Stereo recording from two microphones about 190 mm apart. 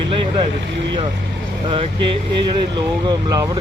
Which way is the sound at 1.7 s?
25° right (ahead or behind).